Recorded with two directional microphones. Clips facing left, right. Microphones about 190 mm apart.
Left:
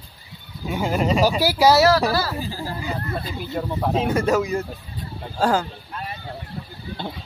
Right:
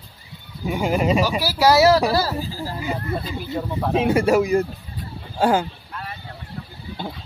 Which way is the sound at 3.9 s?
10° right (ahead or behind).